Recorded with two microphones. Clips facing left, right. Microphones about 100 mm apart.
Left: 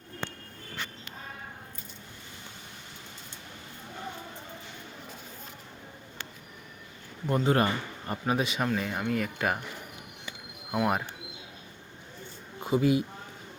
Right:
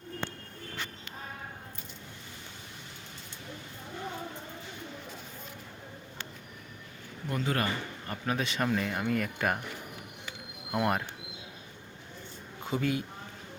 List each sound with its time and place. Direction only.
7.3 s speech: 25° left (ahead or behind)
8.4 s speech: 5° left (ahead or behind)
10.7 s speech: 5° left (ahead or behind)
12.6 s speech: 15° left (ahead or behind)